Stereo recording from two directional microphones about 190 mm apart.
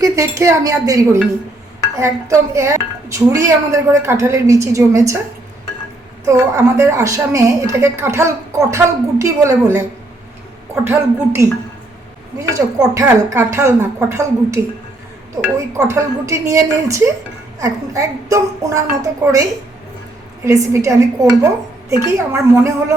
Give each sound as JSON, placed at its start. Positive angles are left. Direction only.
{"t": 0.0, "sound": "a woman's voice", "side_deg": -15}
{"t": 6.2, "sound": "a woman's voice", "side_deg": -15}
{"t": 10.8, "sound": "a woman's voice", "side_deg": -15}
{"t": 12.5, "sound": "a woman's voice", "side_deg": -15}
{"t": 20.4, "sound": "a woman's voice", "side_deg": -15}